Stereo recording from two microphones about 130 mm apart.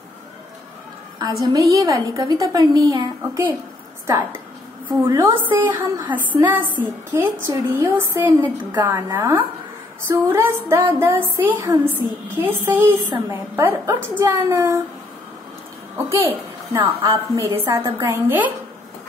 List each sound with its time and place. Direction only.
1.4 s a woman's voice: 25° right (ahead or behind)
4.8 s a woman's voice: 20° right (ahead or behind)
16.1 s a woman's voice: 20° right (ahead or behind)